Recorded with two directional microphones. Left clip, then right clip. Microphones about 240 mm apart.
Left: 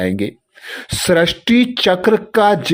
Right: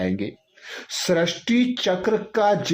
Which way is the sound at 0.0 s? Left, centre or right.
Left.